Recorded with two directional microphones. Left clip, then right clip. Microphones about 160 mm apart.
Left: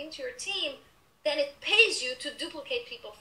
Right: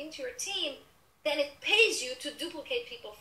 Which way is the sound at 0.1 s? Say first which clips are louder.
Left 2 dB; 10° right (ahead or behind).